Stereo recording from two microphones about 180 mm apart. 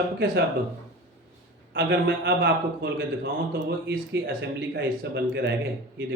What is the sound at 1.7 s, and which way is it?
Speech, 80° right.